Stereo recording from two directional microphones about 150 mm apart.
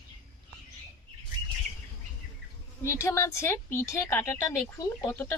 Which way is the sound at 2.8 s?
20° left (ahead or behind).